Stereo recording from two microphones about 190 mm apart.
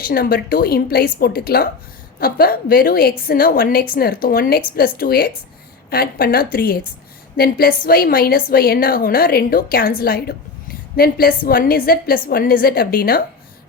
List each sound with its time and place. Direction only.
0.1 s a woman's voice: 50° left (ahead or behind)